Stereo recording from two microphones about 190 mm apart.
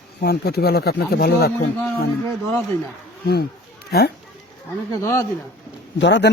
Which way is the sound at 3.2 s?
55° left (ahead or behind).